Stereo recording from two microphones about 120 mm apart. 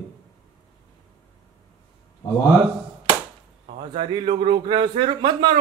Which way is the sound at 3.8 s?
45° right (ahead or behind).